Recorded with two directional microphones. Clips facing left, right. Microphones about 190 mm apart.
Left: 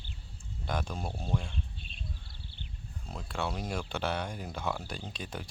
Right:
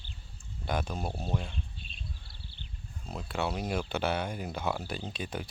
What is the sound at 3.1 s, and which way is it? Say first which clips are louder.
Speech: right 3 dB; 5° right (ahead or behind).